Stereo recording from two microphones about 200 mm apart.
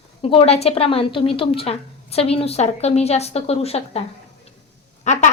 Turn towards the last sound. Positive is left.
turn(degrees=35)  # may be behind; listen again after turning